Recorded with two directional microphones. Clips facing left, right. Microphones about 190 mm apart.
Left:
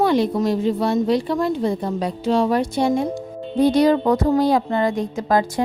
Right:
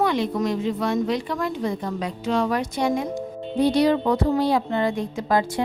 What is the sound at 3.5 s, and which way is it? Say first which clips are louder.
A woman's voice: left 3 dB; 45° left (ahead or behind).